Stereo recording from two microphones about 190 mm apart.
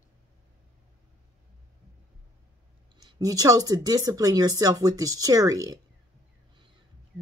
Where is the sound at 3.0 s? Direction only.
20° right (ahead or behind).